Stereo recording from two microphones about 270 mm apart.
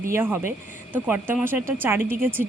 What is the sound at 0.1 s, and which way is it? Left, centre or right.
Speech, centre.